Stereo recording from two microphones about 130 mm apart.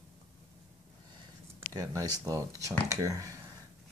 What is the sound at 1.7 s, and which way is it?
Speech, 30° right (ahead or behind).